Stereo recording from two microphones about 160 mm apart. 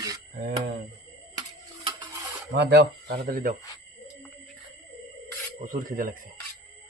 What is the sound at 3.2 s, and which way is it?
Speech, 65° right (ahead or behind).